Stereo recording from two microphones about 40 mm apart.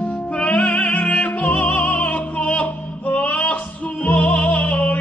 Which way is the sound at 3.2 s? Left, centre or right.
Left.